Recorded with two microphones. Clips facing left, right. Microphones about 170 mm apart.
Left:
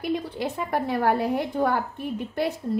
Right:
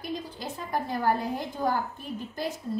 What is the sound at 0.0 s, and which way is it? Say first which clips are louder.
A woman's voice: left 8 dB; 65° left (ahead or behind).